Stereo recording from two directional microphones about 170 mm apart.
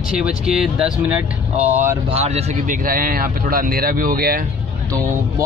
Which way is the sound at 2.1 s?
35° right (ahead or behind).